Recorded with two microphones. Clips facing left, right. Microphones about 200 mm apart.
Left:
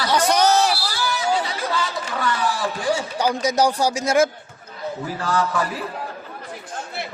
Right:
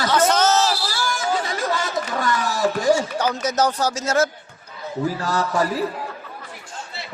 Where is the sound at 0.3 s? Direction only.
15° left (ahead or behind).